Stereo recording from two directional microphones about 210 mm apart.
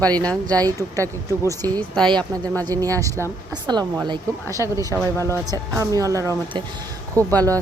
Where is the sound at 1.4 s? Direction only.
15° right (ahead or behind).